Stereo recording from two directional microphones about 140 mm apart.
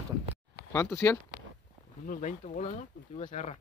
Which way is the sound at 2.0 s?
65° left (ahead or behind).